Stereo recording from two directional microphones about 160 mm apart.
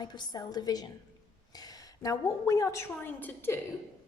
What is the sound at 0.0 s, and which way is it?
A woman's voice, 25° left (ahead or behind).